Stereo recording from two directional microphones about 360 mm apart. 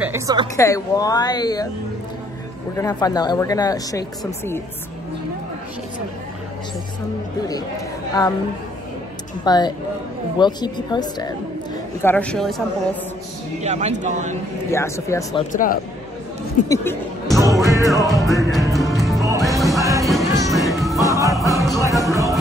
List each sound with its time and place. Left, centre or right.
0.0 s a woman's voice: centre
0.6 s speech: centre
2.8 s speech: centre
9.4 s a woman's voice: centre
13.6 s a man's voice: centre
14.7 s speech: centre
15.5 s a man's voice: left
16.6 s speech: centre
17.4 s music: centre